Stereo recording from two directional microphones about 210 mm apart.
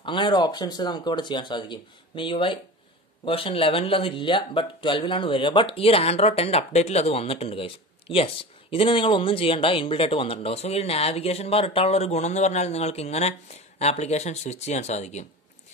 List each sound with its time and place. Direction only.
0.0 s speech: 20° left (ahead or behind)